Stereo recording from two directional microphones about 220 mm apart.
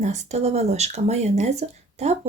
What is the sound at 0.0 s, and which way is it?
Speech, 30° right (ahead or behind).